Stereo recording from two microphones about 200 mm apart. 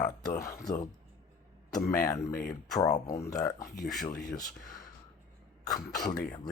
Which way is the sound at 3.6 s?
45° left (ahead or behind).